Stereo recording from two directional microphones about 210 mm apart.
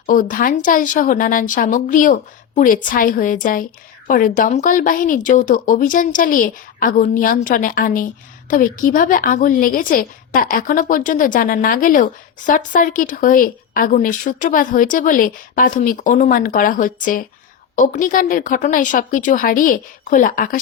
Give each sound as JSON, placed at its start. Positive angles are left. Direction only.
{"t": 0.0, "sound": "a woman's voice", "side_deg": 40}